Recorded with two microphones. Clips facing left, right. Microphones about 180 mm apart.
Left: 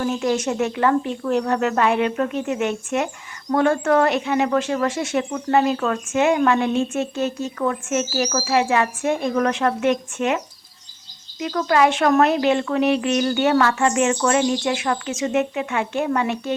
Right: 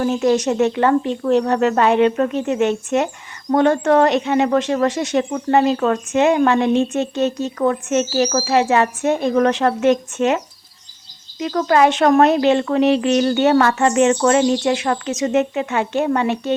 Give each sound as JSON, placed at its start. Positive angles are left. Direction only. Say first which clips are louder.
{"t": 0.0, "sound": "speech", "louder": "right 5 dB", "side_deg": -35}